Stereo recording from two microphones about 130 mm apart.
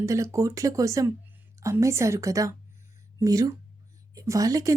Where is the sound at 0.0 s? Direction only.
25° right (ahead or behind).